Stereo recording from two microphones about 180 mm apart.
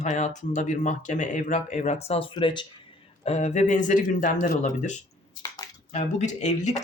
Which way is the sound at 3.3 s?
40° left (ahead or behind).